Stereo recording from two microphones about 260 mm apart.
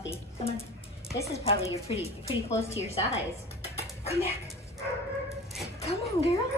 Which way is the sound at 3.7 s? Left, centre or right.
Left.